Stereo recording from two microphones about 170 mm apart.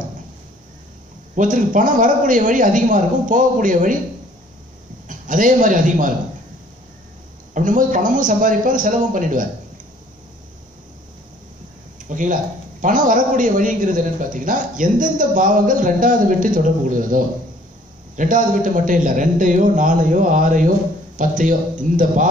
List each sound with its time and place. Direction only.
1.3 s a man's voice: 50° right (ahead or behind)
5.0 s a man's voice: 50° right (ahead or behind)
7.5 s a man's voice: 50° right (ahead or behind)
12.1 s a man's voice: 50° right (ahead or behind)